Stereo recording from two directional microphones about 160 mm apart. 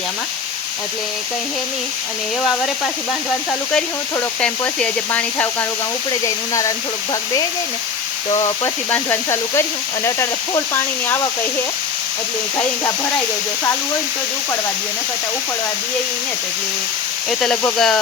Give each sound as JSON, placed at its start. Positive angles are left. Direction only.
{"t": 4.4, "sound": "speech", "side_deg": 5}
{"t": 6.1, "sound": "speech", "side_deg": 20}
{"t": 8.9, "sound": "speech", "side_deg": 15}
{"t": 17.2, "sound": "speech", "side_deg": 5}